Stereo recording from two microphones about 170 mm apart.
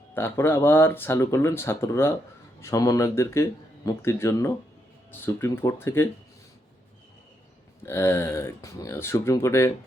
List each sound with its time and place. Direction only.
0.1 s speech: 15° left (ahead or behind)
7.9 s speech: 15° left (ahead or behind)